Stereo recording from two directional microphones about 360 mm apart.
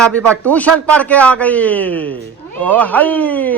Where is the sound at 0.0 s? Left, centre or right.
Centre.